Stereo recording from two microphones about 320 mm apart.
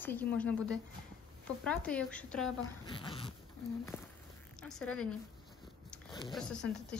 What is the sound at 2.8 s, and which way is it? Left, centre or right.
Speech, centre.